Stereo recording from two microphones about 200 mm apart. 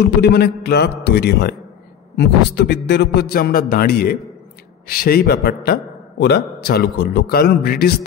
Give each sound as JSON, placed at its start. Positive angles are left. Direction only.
{"t": 0.2, "sound": "a man's voice", "side_deg": 55}